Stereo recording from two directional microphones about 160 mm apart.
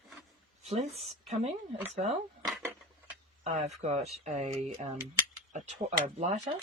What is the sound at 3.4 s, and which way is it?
Speech, 45° right (ahead or behind).